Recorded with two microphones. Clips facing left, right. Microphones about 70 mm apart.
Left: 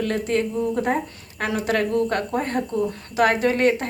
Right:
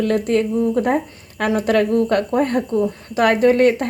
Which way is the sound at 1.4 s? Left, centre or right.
Right.